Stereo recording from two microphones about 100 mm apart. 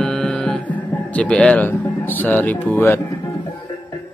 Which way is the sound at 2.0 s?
20° left (ahead or behind).